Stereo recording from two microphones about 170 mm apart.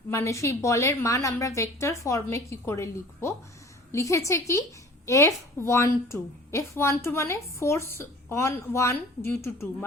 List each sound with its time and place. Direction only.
0.1 s a woman's voice: 15° left (ahead or behind)